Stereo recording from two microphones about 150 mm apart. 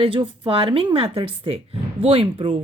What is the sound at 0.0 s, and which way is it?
Speech, 35° right (ahead or behind).